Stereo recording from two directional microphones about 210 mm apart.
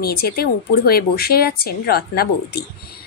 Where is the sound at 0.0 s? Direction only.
45° left (ahead or behind).